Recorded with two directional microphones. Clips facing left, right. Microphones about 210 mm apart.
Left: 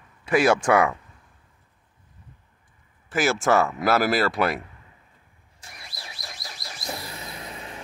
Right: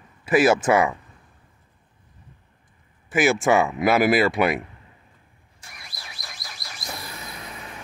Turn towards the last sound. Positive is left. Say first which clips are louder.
# left 1 dB
turn(degrees=30)  # may be behind; listen again after turning